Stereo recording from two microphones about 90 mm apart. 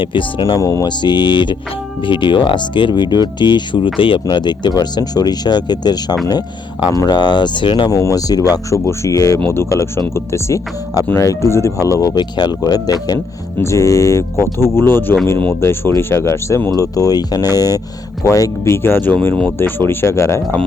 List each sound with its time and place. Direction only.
0.0 s speech: 70° left (ahead or behind)
0.5 s speech: 40° left (ahead or behind)
0.9 s speech: 55° left (ahead or behind)
7.9 s speech: 40° left (ahead or behind)
12.1 s speech: 50° left (ahead or behind)
13.6 s speech: 30° left (ahead or behind)
16.7 s speech: 40° left (ahead or behind)